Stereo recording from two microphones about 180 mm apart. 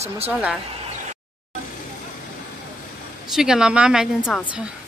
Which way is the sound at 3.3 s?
5° right (ahead or behind).